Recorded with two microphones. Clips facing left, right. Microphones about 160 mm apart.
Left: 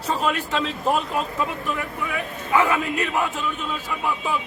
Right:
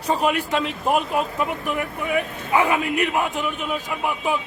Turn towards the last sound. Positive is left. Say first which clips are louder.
# right 2 dB
turn(degrees=-20)  # may be behind; listen again after turning